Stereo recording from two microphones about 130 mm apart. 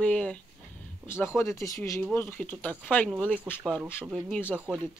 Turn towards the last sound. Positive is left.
turn(degrees=-10)  # may be behind; listen again after turning